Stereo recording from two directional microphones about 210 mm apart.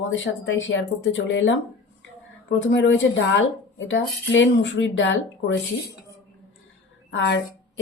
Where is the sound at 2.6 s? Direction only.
55° left (ahead or behind).